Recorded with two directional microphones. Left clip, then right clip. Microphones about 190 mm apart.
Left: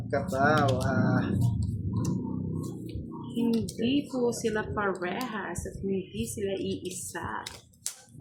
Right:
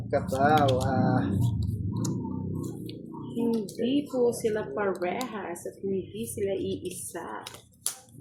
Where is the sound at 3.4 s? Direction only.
25° left (ahead or behind).